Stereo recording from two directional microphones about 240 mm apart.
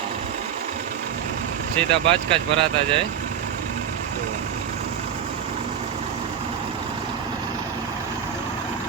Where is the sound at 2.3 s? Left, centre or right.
Right.